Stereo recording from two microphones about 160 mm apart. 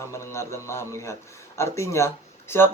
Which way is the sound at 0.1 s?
15° left (ahead or behind).